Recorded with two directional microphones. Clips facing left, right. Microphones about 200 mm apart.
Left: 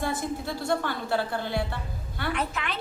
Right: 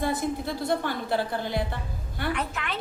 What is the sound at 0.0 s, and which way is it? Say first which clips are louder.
A woman's voice: right 2 dB; 20° right (ahead or behind).